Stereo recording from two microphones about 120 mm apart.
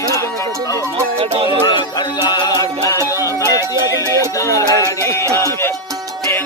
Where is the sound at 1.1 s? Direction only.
55° right (ahead or behind).